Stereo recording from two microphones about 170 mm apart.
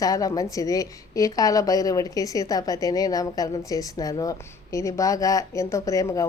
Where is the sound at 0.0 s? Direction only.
20° left (ahead or behind).